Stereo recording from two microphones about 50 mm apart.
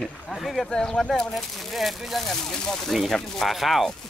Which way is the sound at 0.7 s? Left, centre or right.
Centre.